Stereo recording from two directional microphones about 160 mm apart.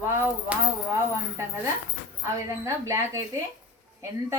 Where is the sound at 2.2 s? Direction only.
20° right (ahead or behind).